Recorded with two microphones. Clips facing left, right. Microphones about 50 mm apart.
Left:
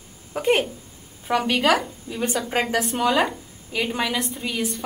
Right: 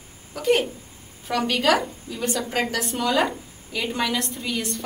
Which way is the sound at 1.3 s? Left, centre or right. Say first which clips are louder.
Left 1 dB; centre.